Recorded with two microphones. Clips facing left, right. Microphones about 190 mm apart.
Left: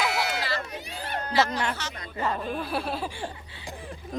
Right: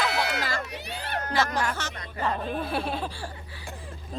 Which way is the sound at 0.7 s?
70° right (ahead or behind).